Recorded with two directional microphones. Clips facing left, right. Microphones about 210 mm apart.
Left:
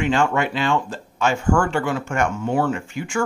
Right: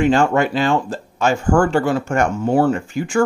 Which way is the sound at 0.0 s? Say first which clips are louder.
Right 5 dB; 40° right (ahead or behind).